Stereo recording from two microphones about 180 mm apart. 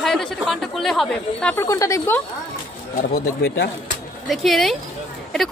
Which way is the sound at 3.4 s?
65° left (ahead or behind).